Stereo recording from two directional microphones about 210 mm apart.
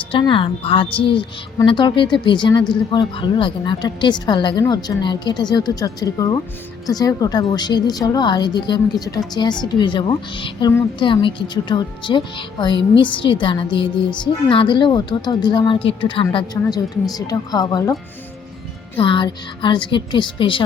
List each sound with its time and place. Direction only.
0.1 s a woman's voice: 25° left (ahead or behind)
18.9 s a woman's voice: 25° left (ahead or behind)